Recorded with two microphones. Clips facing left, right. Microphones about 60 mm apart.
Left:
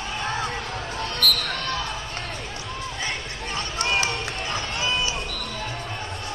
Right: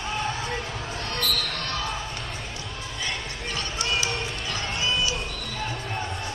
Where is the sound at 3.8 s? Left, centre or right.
Left.